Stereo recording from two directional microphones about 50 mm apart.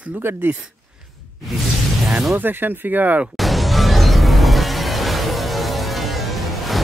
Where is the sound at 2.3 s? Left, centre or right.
Right.